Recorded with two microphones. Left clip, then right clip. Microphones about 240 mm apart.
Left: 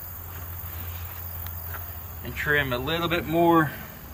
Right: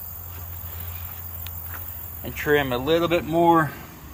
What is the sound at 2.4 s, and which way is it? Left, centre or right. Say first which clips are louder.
Speech: right 3 dB; right.